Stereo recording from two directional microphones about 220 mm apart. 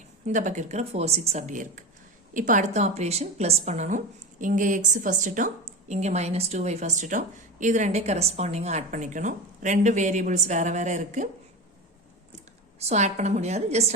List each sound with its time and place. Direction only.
0.3 s a woman's voice: 35° right (ahead or behind)
12.8 s a woman's voice: 30° right (ahead or behind)